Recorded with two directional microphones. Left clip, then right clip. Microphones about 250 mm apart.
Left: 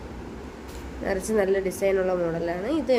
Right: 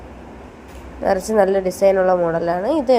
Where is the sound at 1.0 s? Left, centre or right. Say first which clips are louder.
Right 8 dB; centre.